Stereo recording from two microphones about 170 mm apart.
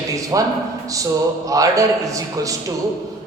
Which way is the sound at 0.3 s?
20° right (ahead or behind).